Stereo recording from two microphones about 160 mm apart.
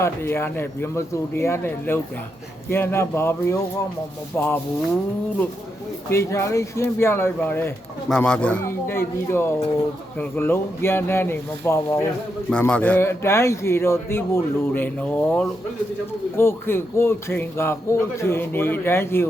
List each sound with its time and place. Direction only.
0.0 s a man's voice: 15° left (ahead or behind)
6.1 s a man's voice: 15° left (ahead or behind)